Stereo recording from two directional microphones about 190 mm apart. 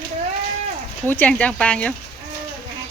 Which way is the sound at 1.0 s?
10° left (ahead or behind).